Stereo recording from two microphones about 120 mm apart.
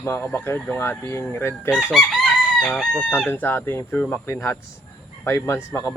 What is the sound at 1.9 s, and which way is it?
Chicken, centre (ahead or behind).